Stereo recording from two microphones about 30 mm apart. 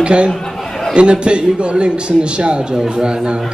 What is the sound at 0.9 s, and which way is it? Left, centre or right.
A man's voice, right.